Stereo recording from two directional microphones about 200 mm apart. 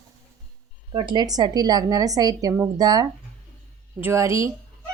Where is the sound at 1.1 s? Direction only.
20° right (ahead or behind).